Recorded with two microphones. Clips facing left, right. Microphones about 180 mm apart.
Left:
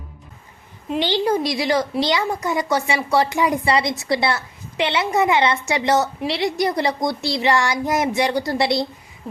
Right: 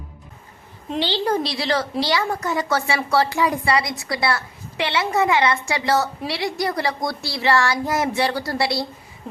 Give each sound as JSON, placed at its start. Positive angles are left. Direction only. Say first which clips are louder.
{"t": 0.9, "sound": "a woman's voice", "louder": "left 2 dB", "side_deg": 15}